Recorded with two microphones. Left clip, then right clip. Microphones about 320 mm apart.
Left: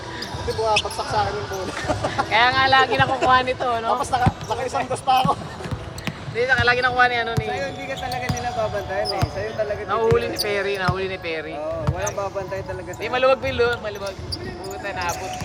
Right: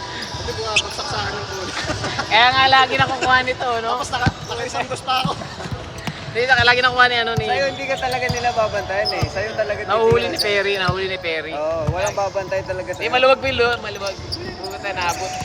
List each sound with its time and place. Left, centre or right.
2.3 s speech: centre
4.1 s speech: centre
6.3 s speech: centre
7.5 s speech: right
9.9 s speech: centre
13.0 s speech: centre